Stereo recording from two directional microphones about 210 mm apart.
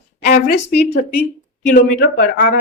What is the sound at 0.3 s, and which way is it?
Speech, 40° left (ahead or behind).